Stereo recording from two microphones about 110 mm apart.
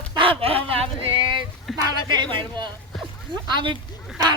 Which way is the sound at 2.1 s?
40° right (ahead or behind).